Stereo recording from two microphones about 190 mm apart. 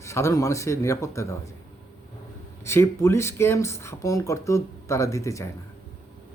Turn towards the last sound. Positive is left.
turn(degrees=15)  # may be behind; listen again after turning